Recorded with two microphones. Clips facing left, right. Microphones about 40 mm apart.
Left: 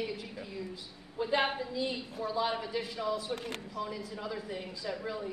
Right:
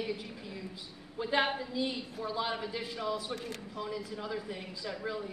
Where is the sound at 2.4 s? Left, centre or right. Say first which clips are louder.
Left 3 dB; centre.